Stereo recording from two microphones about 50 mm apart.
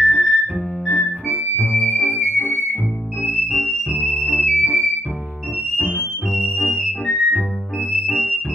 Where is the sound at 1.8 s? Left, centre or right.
Left.